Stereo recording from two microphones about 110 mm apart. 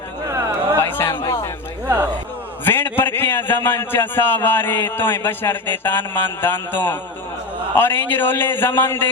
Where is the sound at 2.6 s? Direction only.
20° left (ahead or behind).